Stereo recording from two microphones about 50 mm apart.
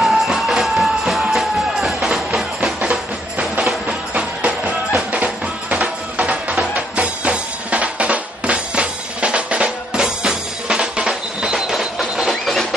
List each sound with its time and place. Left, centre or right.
0.0 s music: centre
2.8 s music: centre
12.3 s printer: centre